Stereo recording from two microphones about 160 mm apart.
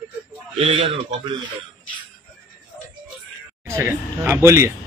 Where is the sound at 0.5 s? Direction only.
35° right (ahead or behind).